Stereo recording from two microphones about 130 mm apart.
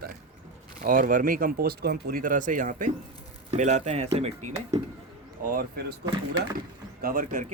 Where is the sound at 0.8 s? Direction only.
90° right.